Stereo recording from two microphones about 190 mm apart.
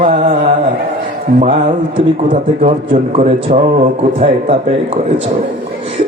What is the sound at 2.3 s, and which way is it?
A man's voice, 40° right (ahead or behind).